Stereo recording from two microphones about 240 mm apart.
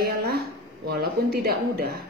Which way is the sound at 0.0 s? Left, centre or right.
Right.